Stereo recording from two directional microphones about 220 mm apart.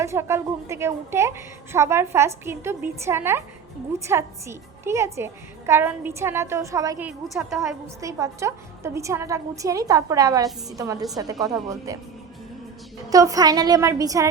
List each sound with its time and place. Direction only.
0.0 s a woman's voice: 10° right (ahead or behind)
7.3 s a woman's voice: centre (ahead or behind)
8.0 s a woman's voice: 15° right (ahead or behind)
13.1 s a woman's voice: 15° right (ahead or behind)